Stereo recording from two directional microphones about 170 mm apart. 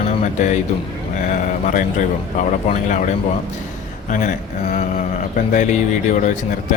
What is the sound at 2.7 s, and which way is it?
A man's voice, 45° left (ahead or behind).